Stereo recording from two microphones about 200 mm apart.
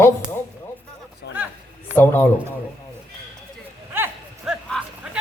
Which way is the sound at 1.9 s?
10° left (ahead or behind).